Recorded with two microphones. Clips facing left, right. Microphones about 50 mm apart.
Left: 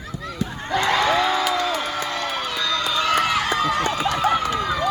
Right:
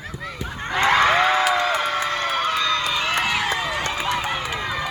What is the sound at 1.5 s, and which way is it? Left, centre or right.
Music, right.